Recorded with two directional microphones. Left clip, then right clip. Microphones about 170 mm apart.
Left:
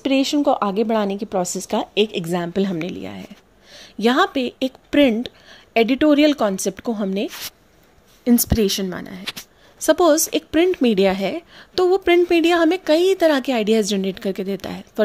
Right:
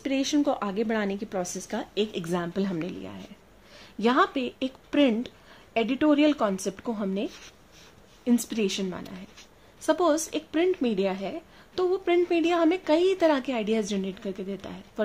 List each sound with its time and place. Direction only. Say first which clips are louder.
0.0 s a woman's voice: left 8 dB; 35° left (ahead or behind)